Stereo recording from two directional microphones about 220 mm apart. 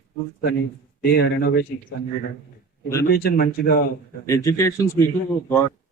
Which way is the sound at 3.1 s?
45° left (ahead or behind).